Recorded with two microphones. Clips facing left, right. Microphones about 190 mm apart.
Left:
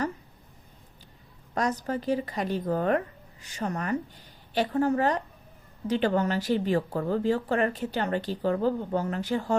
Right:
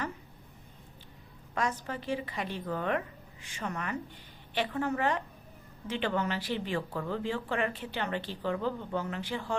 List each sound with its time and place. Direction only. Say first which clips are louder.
1.5 s speech: left 5 dB; 40° left (ahead or behind)